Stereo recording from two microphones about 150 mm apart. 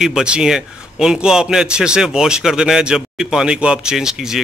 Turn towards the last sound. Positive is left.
turn(degrees=-5)  # may be behind; listen again after turning